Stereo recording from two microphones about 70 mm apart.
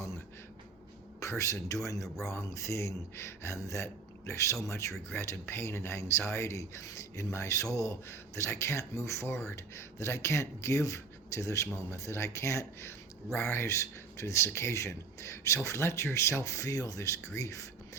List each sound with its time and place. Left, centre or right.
1.2 s speech: left
5.0 s speech: left
8.4 s speech: left